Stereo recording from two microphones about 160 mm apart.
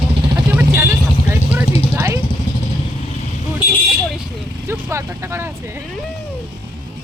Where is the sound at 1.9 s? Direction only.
15° right (ahead or behind).